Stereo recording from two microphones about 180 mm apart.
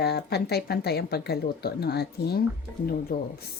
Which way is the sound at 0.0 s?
65° left (ahead or behind).